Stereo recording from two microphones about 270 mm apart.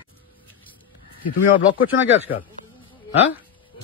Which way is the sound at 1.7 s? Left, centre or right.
Left.